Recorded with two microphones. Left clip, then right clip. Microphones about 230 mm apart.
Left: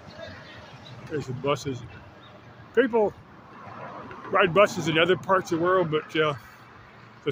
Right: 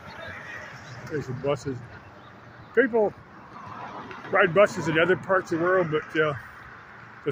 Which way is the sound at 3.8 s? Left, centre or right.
Right.